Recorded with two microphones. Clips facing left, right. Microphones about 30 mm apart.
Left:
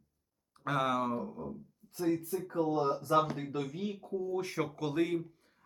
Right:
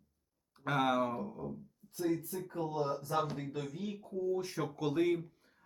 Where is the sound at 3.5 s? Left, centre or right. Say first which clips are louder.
Left 4 dB; left.